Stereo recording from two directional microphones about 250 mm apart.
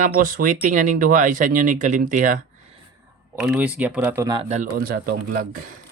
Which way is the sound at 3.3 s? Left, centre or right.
Centre.